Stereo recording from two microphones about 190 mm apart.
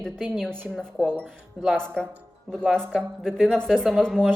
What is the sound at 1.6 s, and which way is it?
Speech, 5° left (ahead or behind).